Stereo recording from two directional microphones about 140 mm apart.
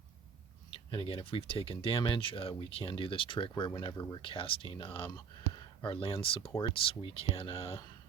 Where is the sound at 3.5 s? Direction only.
25° left (ahead or behind); by 7.8 s 45° left (ahead or behind).